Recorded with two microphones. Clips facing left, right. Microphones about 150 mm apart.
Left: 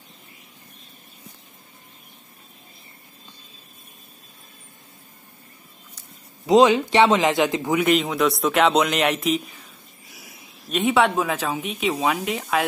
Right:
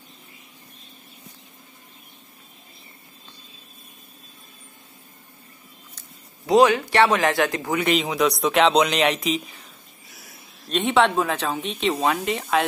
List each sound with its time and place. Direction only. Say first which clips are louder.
5.9 s a man's voice: even; 15° left (ahead or behind)
7.7 s speech: left 3 dB; centre (ahead or behind)